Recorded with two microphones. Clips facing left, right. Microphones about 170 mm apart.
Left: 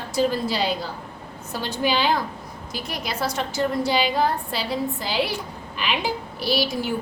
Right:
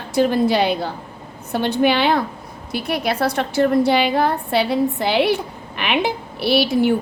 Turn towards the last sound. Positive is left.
turn(degrees=-60)  # may be behind; listen again after turning